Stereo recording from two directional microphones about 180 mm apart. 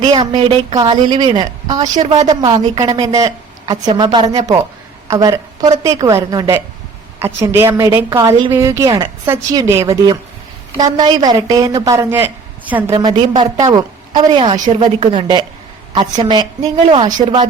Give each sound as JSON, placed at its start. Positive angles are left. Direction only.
{"t": 0.0, "sound": "a woman's voice", "side_deg": -25}
{"t": 13.0, "sound": "a woman's voice", "side_deg": -25}